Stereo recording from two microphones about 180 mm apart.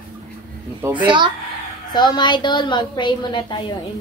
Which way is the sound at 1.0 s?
25° right (ahead or behind).